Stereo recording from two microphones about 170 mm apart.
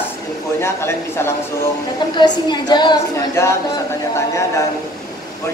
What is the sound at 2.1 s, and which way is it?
A woman's voice, 25° left (ahead or behind).